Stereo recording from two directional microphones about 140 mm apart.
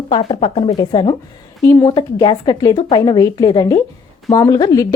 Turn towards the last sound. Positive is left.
turn(degrees=25)  # may be behind; listen again after turning